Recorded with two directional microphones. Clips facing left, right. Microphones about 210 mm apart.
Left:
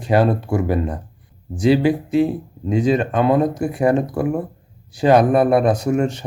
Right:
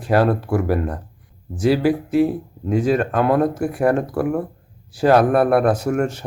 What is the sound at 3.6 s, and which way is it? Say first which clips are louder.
Speech: left 1 dB; 20° left (ahead or behind).